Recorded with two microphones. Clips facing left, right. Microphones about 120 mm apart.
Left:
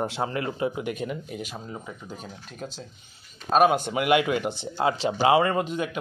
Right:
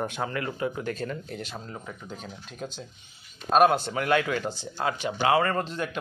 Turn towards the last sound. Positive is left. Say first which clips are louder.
# left 3 dB
turn(degrees=10)  # may be behind; listen again after turning